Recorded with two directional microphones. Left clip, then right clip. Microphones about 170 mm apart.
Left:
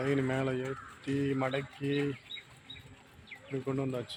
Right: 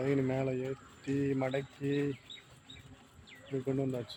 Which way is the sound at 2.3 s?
20° right (ahead or behind).